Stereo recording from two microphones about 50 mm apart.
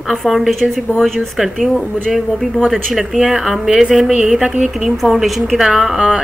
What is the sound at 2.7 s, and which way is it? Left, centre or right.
A woman's voice, centre.